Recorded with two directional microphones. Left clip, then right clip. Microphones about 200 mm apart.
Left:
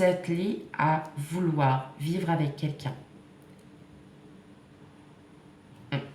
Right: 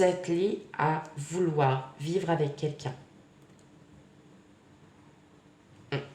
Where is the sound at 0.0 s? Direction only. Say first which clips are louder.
Even; 35° right (ahead or behind).